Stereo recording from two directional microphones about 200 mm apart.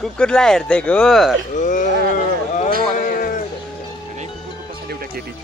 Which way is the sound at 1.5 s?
40° left (ahead or behind).